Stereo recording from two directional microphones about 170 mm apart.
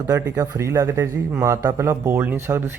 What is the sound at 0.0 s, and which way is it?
Speech, 15° right (ahead or behind).